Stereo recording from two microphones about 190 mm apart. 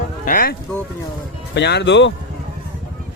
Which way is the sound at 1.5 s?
65° left (ahead or behind).